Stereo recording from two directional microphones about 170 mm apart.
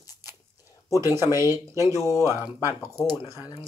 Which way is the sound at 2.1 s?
20° left (ahead or behind).